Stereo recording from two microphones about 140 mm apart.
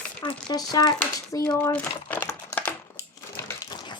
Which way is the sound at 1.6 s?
15° left (ahead or behind).